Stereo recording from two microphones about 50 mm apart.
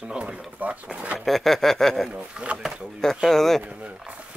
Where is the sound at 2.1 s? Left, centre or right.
Right.